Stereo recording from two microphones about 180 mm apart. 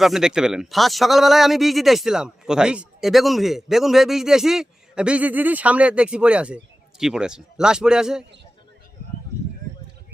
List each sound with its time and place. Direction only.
0.0 s speech: centre (ahead or behind)